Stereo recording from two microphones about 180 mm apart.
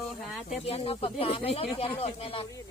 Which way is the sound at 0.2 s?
Centre (ahead or behind).